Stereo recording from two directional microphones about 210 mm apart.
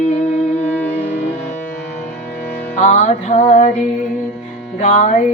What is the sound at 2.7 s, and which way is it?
Music, 35° left (ahead or behind).